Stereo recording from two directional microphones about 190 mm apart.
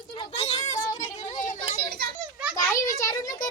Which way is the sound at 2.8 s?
15° left (ahead or behind).